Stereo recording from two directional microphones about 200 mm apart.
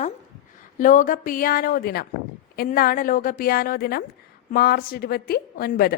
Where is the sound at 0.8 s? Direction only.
40° left (ahead or behind).